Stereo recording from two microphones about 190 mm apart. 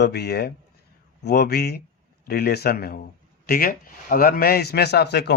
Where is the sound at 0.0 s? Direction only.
60° left (ahead or behind).